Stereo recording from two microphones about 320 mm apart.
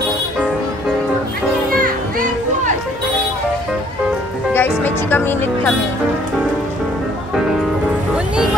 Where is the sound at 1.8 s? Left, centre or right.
Right.